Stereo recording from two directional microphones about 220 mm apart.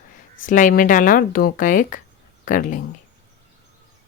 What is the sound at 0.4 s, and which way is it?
Speech, 35° left (ahead or behind).